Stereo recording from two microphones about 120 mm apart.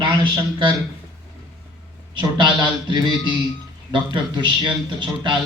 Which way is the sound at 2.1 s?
40° right (ahead or behind).